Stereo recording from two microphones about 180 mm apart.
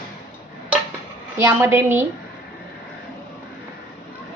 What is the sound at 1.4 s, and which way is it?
Speech, 15° right (ahead or behind).